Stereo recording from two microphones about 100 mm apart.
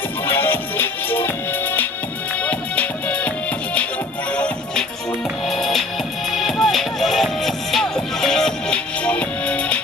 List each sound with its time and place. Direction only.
0.3 s music: 20° left (ahead or behind)
5.5 s music: 5° left (ahead or behind)